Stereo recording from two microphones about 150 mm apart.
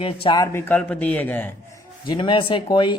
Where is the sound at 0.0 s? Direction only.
35° left (ahead or behind).